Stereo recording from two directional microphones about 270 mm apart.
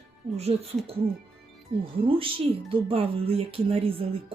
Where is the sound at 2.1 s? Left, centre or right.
Centre.